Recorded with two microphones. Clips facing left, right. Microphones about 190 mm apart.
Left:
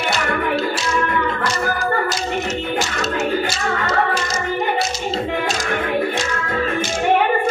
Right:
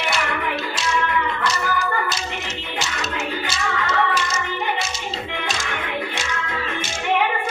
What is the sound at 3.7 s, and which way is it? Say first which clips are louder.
Music: left 1 dB; 45° left (ahead or behind).